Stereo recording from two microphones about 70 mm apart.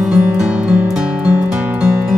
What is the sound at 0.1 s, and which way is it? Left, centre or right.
Music, centre.